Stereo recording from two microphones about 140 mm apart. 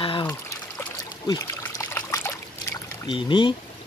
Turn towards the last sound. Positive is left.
turn(degrees=35)  # may be behind; listen again after turning